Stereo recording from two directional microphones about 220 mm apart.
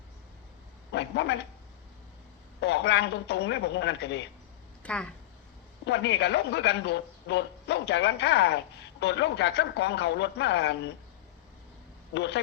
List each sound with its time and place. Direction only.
0.9 s a man's voice: 50° left (ahead or behind)
2.6 s a man's voice: 50° left (ahead or behind)
4.8 s speech: 5° left (ahead or behind)
5.8 s a man's voice: 50° left (ahead or behind)
12.1 s a man's voice: 50° left (ahead or behind)